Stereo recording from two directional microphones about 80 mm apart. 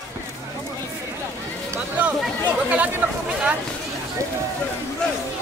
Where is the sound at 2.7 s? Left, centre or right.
Right.